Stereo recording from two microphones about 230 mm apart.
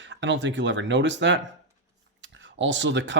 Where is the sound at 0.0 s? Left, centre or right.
Right.